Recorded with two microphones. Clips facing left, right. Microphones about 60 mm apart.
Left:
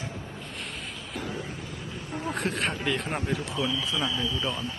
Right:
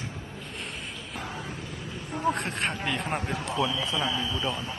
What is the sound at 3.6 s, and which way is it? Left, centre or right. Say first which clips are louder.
Speech: right 3 dB; right.